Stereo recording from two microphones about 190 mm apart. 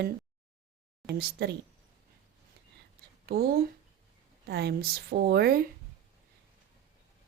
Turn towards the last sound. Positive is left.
turn(degrees=-55)  # may be behind; listen again after turning